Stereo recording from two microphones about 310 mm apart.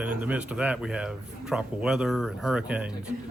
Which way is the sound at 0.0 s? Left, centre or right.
Centre.